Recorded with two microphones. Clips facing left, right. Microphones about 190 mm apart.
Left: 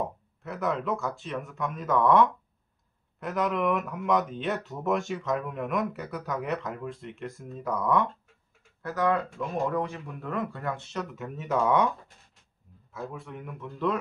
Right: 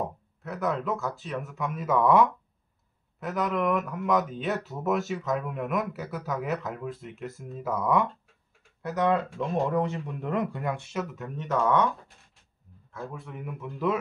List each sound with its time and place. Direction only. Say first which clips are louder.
0.0 s speech: even; centre (ahead or behind)
8.8 s speech: right 1 dB; 20° right (ahead or behind); by 11.9 s 10° left (ahead or behind)
12.9 s speech: left 1 dB; centre (ahead or behind)